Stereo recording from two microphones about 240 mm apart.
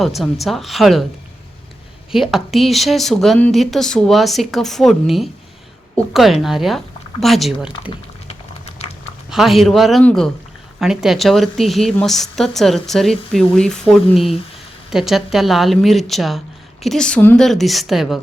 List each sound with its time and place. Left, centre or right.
0.0 s a woman's voice: centre
2.1 s a woman's voice: centre
9.3 s a woman's voice: centre